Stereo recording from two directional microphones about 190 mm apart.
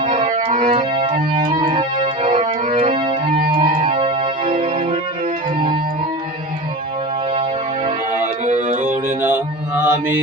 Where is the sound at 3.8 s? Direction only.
30° right (ahead or behind).